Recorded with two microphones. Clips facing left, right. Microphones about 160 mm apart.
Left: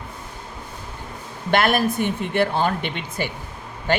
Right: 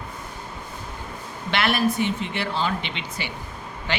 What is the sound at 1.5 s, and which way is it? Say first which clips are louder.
Speech: left 3 dB; 50° left (ahead or behind).